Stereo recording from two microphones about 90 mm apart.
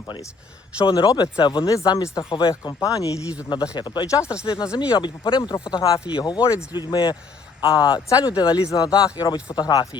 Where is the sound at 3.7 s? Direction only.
55° left (ahead or behind).